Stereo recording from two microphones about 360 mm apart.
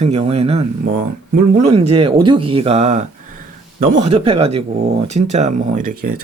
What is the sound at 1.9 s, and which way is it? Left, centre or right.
Speech, centre.